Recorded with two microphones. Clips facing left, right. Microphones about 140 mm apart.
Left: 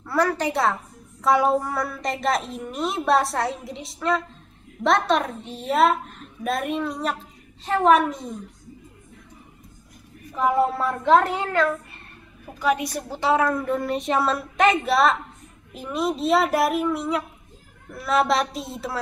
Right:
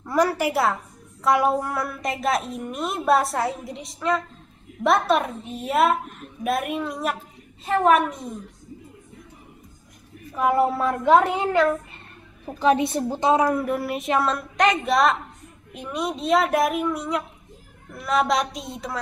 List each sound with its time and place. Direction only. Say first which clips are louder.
0.0 s a woman's voice: right 1 dB; 15° right (ahead or behind)
10.3 s a woman's voice: right 1 dB; 5° right (ahead or behind)
11.1 s a woman's voice: right 1 dB; 15° right (ahead or behind)
12.4 s a woman's voice: right 4 dB; 25° right (ahead or behind); by 18.9 s centre (ahead or behind)